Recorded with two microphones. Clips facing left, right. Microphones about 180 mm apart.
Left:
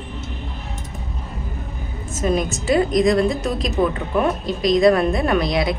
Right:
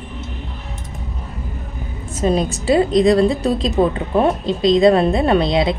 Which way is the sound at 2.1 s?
30° right (ahead or behind).